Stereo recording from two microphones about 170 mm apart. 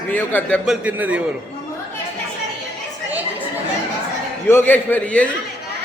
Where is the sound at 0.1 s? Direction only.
10° left (ahead or behind); by 1.2 s 10° right (ahead or behind).